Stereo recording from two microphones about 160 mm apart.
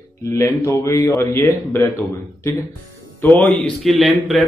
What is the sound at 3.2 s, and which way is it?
A man's voice, 10° left (ahead or behind).